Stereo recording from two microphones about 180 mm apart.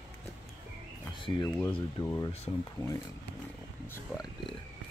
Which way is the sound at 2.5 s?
25° left (ahead or behind).